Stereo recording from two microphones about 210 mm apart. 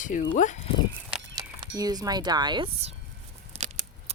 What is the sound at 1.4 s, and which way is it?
Speech, 20° right (ahead or behind).